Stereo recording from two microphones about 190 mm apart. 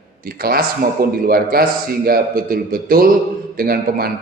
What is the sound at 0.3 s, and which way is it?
A man's voice, 50° right (ahead or behind).